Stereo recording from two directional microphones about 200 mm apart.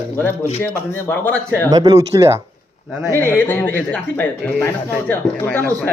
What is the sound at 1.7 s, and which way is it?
Speech, 20° right (ahead or behind).